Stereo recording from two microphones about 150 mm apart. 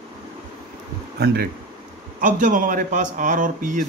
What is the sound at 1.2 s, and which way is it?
Speech, 90° right.